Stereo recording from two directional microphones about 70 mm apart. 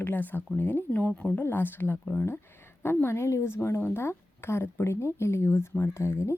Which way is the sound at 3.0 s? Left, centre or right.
Left.